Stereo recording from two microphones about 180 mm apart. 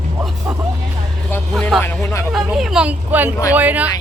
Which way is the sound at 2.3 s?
Centre (ahead or behind).